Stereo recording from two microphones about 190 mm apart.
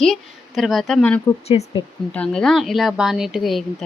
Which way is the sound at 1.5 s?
25° left (ahead or behind).